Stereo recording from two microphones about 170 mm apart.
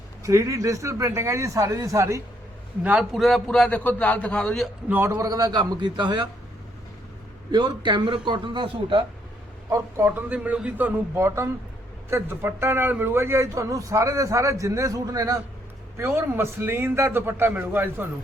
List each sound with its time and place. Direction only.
0.2 s a man's voice: 20° right (ahead or behind)
2.8 s a man's voice: 5° right (ahead or behind)
4.9 s a man's voice: 10° right (ahead or behind); by 6.2 s 25° right (ahead or behind)
7.5 s a man's voice: 25° right (ahead or behind)
9.6 s a man's voice: 15° right (ahead or behind)